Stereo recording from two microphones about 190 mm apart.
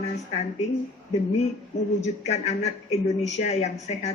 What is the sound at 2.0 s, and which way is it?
Speech, 35° left (ahead or behind).